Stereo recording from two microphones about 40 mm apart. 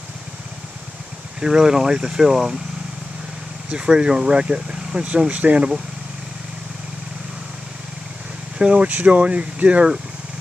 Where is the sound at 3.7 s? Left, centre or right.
Right.